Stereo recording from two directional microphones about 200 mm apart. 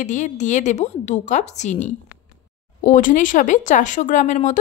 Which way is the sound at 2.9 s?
40° left (ahead or behind).